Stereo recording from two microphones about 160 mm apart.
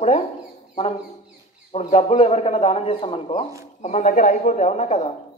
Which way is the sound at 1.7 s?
40° left (ahead or behind).